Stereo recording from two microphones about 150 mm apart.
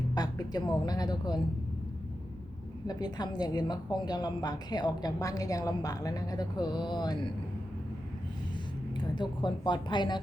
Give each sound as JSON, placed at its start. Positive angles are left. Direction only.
{"t": 0.1, "sound": "speech", "side_deg": 25}
{"t": 2.8, "sound": "a woman's voice", "side_deg": 25}
{"t": 8.9, "sound": "a woman's voice", "side_deg": 30}